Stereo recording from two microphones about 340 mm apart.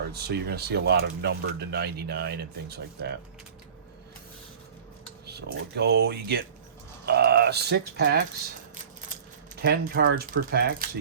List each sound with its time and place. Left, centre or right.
0.1 s speech: right
5.2 s speech: right
9.6 s speech: right